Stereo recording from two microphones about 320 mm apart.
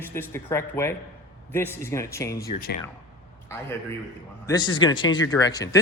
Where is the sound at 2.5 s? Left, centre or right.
Left.